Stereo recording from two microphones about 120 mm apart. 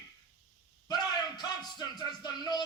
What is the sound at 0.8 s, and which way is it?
A man's voice, 35° left (ahead or behind).